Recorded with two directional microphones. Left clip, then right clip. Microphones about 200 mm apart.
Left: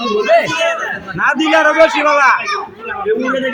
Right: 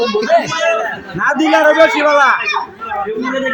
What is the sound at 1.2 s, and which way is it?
A man's voice, 15° right (ahead or behind).